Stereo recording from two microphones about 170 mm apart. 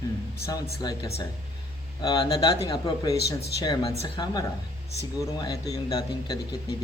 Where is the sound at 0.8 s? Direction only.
20° left (ahead or behind).